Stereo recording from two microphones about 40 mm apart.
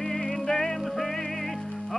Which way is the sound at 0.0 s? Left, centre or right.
Centre.